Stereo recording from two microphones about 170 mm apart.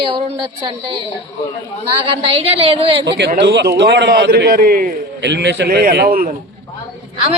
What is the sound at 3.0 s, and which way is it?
A man's voice, 90° right.